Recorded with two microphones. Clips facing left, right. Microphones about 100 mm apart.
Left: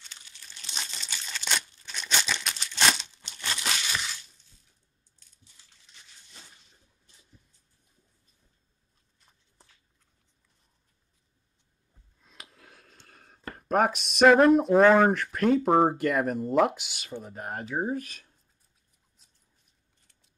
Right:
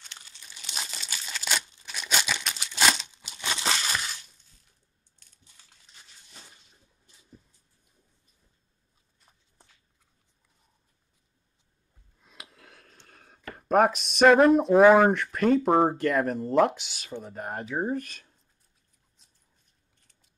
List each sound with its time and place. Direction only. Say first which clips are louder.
0.5 s crumpling: right 1 dB; 5° right (ahead or behind)
3.3 s crumpling: right 2 dB; 15° right (ahead or behind)
12.2 s a sound: right 1 dB; 5° right (ahead or behind)
13.6 s speech: right 3 dB; centre (ahead or behind)